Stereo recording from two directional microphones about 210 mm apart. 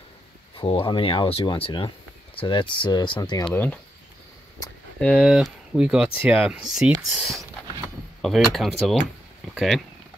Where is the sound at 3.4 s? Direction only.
10° left (ahead or behind).